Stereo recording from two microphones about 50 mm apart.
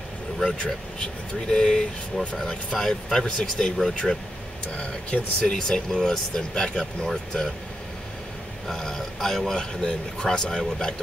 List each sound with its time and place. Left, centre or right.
0.4 s speech: centre
8.6 s speech: centre